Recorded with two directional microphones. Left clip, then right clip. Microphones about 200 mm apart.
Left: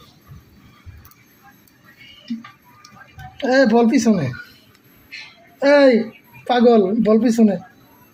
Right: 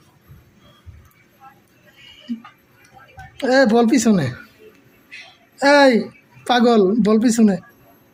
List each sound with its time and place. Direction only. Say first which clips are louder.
3.3 s speech: even; 30° right (ahead or behind)
5.5 s a woman's voice: even; 40° right (ahead or behind)